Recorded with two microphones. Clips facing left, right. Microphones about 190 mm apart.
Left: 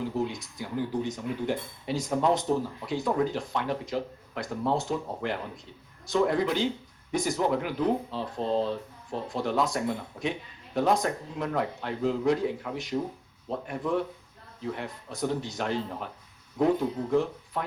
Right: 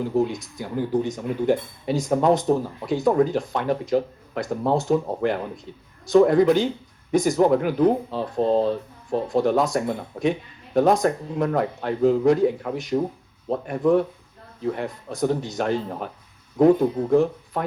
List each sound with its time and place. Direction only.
0.2 s speech: 50° right (ahead or behind)